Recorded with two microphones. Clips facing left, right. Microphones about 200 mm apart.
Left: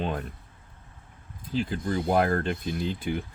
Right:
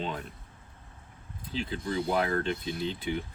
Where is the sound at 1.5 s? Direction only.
45° left (ahead or behind).